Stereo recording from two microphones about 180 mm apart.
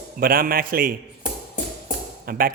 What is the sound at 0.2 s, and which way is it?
Speech, 55° right (ahead or behind).